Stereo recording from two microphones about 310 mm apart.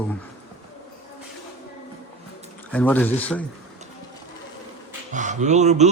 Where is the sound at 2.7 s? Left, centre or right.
Centre.